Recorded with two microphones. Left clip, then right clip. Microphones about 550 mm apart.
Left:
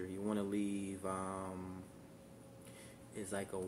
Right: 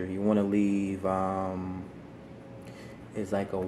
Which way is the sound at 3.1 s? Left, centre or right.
Left.